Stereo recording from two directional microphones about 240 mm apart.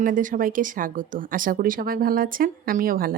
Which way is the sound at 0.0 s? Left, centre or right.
Right.